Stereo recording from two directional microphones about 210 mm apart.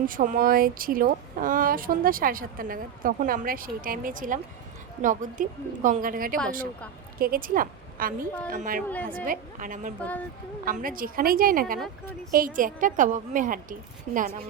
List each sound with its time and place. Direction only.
0.0 s a woman's voice: 40° right (ahead or behind)
10.0 s speech: 5° left (ahead or behind)
10.7 s a woman's voice: 40° right (ahead or behind)